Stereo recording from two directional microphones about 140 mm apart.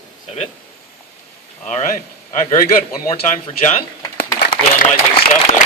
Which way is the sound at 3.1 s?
50° left (ahead or behind).